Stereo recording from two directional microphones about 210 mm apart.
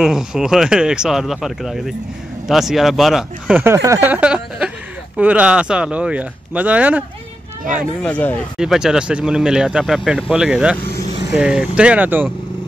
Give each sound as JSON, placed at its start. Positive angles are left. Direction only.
{"t": 0.0, "sound": "speech", "side_deg": -5}
{"t": 8.0, "sound": "speech", "side_deg": 5}
{"t": 10.8, "sound": "vehicle", "side_deg": 45}
{"t": 11.3, "sound": "speech", "side_deg": -5}